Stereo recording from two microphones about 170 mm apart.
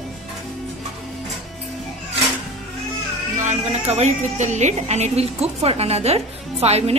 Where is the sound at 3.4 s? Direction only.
40° right (ahead or behind).